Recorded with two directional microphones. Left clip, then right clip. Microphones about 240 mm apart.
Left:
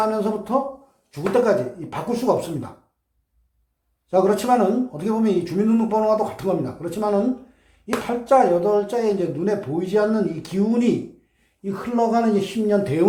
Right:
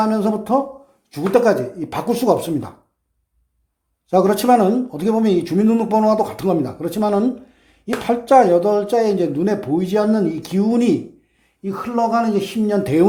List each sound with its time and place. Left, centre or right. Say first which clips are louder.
0.0 s speech: right 3 dB; right
4.1 s speech: right 4 dB; right